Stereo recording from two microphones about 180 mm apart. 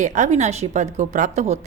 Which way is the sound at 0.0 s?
40° right (ahead or behind).